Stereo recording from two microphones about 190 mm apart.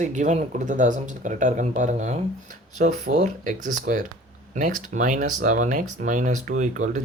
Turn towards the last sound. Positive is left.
turn(degrees=-40)  # may be behind; listen again after turning